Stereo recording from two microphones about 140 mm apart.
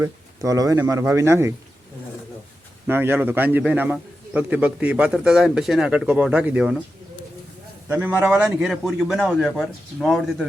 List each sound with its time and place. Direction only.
0.0 s speech: 25° right (ahead or behind)
2.8 s a man's voice: 15° right (ahead or behind)
7.9 s a man's voice: 10° right (ahead or behind)